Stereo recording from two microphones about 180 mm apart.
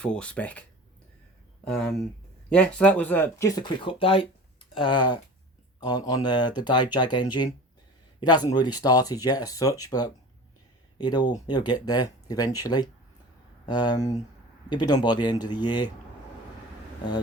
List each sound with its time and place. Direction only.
0.0 s speech: 5° left (ahead or behind)
1.6 s speech: 5° left (ahead or behind); by 15.9 s 25° left (ahead or behind)